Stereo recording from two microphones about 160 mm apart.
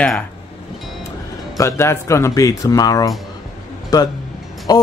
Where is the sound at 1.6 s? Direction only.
15° left (ahead or behind).